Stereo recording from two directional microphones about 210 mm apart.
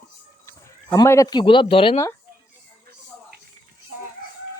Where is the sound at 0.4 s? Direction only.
15° left (ahead or behind).